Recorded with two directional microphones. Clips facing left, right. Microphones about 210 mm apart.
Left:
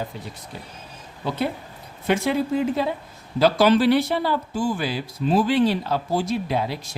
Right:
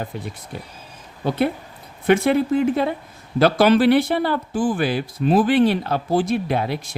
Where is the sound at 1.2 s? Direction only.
55° right (ahead or behind).